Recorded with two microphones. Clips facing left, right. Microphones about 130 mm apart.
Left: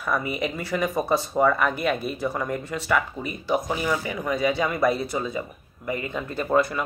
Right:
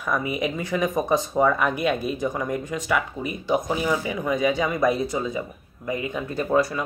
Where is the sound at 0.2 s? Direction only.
5° right (ahead or behind).